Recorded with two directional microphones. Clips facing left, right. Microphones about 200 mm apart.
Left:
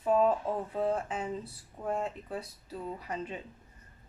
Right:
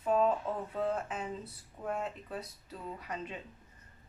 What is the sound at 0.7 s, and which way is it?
Speech, 30° left (ahead or behind).